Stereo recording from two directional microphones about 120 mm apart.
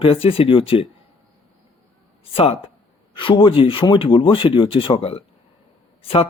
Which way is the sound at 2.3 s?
55° left (ahead or behind).